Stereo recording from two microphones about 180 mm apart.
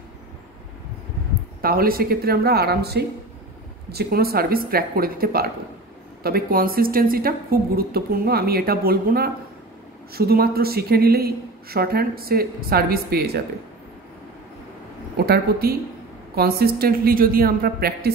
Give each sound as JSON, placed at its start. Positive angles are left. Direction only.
{"t": 1.6, "sound": "a woman's voice", "side_deg": -55}
{"t": 15.1, "sound": "a woman's voice", "side_deg": -60}